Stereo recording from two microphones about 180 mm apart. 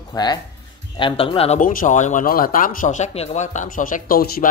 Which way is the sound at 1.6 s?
50° left (ahead or behind).